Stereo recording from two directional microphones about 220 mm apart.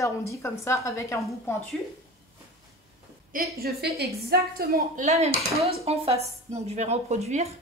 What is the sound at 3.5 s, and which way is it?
A woman's voice, 45° right (ahead or behind).